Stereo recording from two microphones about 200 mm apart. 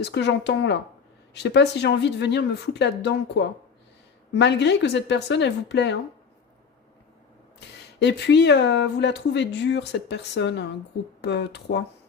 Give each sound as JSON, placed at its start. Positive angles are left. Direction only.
{"t": 0.0, "sound": "speech", "side_deg": 60}
{"t": 7.9, "sound": "speech", "side_deg": 60}